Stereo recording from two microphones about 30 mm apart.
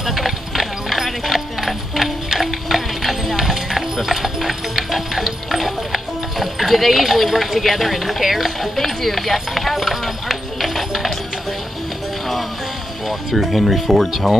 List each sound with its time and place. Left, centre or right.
0.0 s clip-clop: centre
5.2 s music: centre
8.7 s clip-clop: centre
13.3 s speech: centre